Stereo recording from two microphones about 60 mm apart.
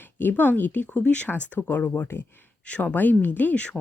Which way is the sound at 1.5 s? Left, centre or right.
Left.